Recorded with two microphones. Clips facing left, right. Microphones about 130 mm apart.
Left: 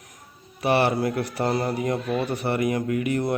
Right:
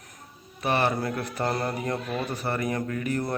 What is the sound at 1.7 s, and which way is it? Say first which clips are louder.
Speech: left 5 dB; 30° left (ahead or behind).